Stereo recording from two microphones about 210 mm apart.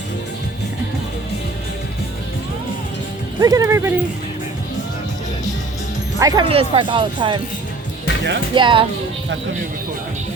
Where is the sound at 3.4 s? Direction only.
15° right (ahead or behind).